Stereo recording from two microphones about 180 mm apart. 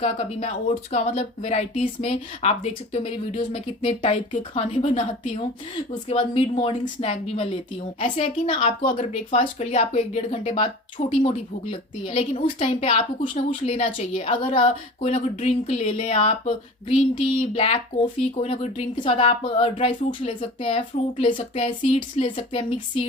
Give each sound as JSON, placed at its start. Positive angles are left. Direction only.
{"t": 0.0, "sound": "speech", "side_deg": 35}
{"t": 8.5, "sound": "a woman's voice", "side_deg": 50}
{"t": 8.9, "sound": "speech", "side_deg": 35}